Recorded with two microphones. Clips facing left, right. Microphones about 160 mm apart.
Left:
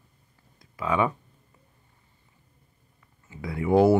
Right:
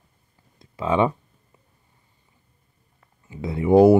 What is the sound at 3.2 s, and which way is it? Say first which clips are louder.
Speech: right 5 dB; 20° right (ahead or behind).